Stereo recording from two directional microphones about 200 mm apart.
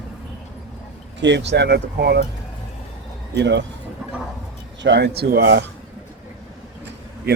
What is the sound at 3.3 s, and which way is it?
Speech, 60° right (ahead or behind).